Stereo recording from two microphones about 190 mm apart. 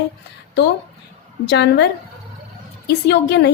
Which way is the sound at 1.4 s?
60° left (ahead or behind).